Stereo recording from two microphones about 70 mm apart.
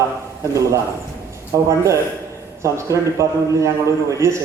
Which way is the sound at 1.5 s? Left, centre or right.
Right.